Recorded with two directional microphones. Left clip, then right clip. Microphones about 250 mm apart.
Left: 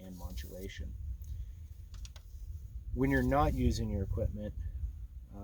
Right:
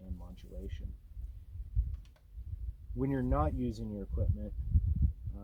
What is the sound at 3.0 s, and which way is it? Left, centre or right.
Speech, left.